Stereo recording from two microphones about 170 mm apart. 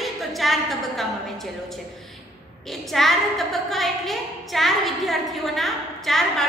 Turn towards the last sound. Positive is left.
turn(degrees=0)  # may be behind; listen again after turning